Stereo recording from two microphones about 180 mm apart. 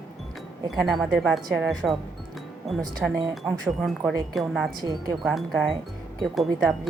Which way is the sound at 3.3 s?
Centre (ahead or behind).